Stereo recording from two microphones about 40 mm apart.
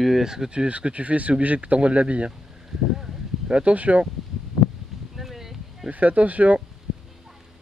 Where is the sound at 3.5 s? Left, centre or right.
Right.